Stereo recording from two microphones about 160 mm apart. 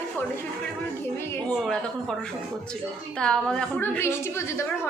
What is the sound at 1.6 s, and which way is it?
A woman's voice, 5° left (ahead or behind).